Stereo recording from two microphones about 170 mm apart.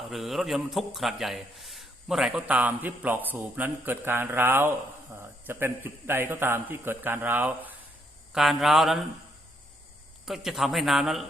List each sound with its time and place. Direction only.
0.0 s a man's voice: centre (ahead or behind)
10.2 s a man's voice: centre (ahead or behind)